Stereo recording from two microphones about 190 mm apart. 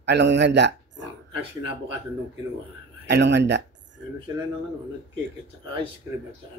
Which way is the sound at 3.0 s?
65° right (ahead or behind).